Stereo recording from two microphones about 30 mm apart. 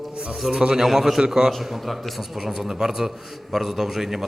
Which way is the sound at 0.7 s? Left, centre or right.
Centre.